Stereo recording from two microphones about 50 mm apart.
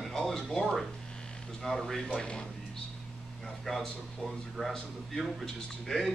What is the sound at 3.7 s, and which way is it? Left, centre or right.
Speech, centre.